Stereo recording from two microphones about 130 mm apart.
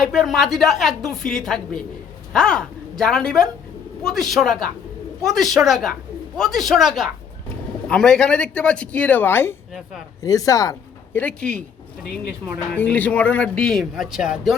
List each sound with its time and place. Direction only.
0.0 s a woman's voice: centre (ahead or behind); by 10.8 s 25° left (ahead or behind)
11.1 s a man's voice: 10° left (ahead or behind)
12.7 s a man's voice: 10° left (ahead or behind); by 14.5 s 5° right (ahead or behind)